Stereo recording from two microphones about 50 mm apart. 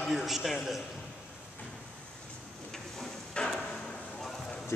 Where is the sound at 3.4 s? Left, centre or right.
Centre.